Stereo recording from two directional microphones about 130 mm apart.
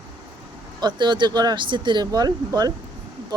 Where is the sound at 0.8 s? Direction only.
35° right (ahead or behind).